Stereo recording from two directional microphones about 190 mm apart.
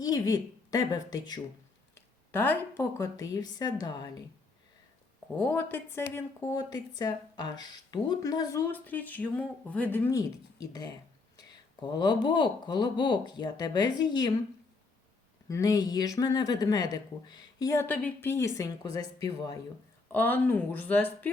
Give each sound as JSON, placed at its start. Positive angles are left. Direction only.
{"t": 0.0, "sound": "a woman's voice", "side_deg": 20}
{"t": 2.0, "sound": "a woman's voice", "side_deg": 10}
{"t": 5.4, "sound": "a woman's voice", "side_deg": 10}
{"t": 15.4, "sound": "a woman's voice", "side_deg": 15}
{"t": 20.1, "sound": "speech", "side_deg": 10}